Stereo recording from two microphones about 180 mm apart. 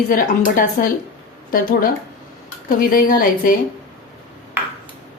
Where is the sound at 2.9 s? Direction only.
50° left (ahead or behind).